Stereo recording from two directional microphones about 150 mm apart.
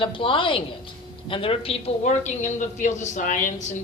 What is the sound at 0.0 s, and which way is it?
A woman's voice, 35° left (ahead or behind).